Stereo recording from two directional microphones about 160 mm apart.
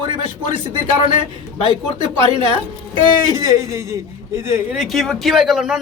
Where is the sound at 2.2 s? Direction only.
30° right (ahead or behind).